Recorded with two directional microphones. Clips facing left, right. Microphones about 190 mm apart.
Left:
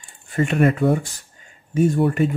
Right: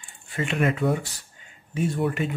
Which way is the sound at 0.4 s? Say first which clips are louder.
Left 6 dB; 45° left (ahead or behind).